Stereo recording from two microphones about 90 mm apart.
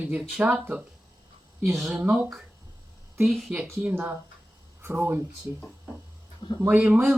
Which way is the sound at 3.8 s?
20° right (ahead or behind).